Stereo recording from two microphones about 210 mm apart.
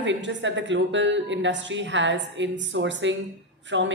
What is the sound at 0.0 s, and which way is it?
Speech, 60° right (ahead or behind).